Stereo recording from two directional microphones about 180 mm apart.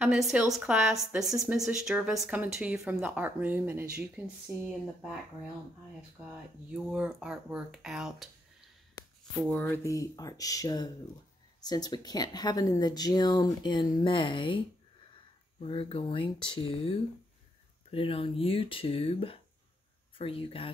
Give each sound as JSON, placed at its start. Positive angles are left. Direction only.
{"t": 0.0, "sound": "a woman's voice", "side_deg": -5}
{"t": 6.7, "sound": "speech", "side_deg": -5}
{"t": 9.5, "sound": "speech", "side_deg": 10}
{"t": 15.6, "sound": "speech", "side_deg": 30}